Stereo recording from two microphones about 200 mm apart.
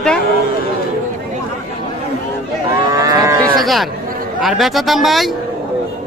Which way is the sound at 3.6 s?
Centre (ahead or behind).